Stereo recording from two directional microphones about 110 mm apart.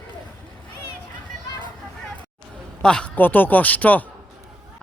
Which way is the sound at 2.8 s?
10° left (ahead or behind).